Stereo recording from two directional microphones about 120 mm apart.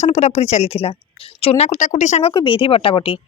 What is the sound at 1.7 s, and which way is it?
Speech, 90° left.